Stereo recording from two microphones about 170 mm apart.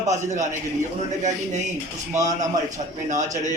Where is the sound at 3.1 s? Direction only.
45° right (ahead or behind).